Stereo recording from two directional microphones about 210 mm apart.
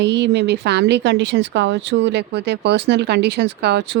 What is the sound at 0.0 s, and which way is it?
A woman's voice, 55° right (ahead or behind).